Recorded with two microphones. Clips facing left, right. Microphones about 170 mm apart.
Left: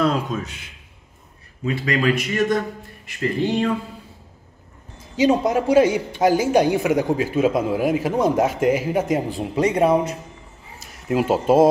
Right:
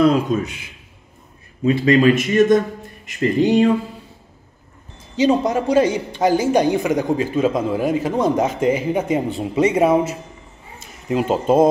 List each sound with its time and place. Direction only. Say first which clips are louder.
0.0 s speech: right 6 dB; 10° right (ahead or behind)
1.6 s speech: right 8 dB; 25° right (ahead or behind)
5.2 s a man's voice: right 1 dB; 5° left (ahead or behind)
11.1 s a man's voice: even; 5° left (ahead or behind)